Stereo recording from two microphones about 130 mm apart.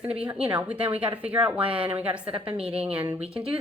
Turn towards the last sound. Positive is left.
turn(degrees=-5)  # may be behind; listen again after turning